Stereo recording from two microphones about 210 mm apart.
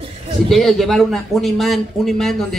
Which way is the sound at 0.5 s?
Centre (ahead or behind).